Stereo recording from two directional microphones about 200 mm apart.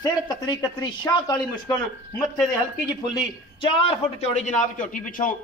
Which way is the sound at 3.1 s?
25° left (ahead or behind).